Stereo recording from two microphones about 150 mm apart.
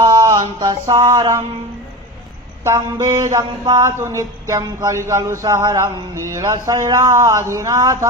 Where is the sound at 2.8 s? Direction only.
25° right (ahead or behind).